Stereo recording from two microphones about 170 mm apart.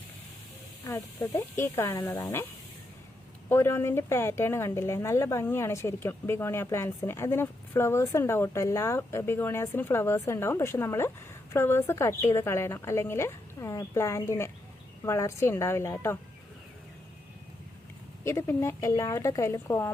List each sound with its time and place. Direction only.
0.9 s speech: 15° left (ahead or behind)
3.5 s speech: 15° left (ahead or behind)
18.3 s speech: 15° left (ahead or behind)